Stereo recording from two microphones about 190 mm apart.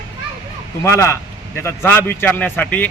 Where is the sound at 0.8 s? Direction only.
15° left (ahead or behind).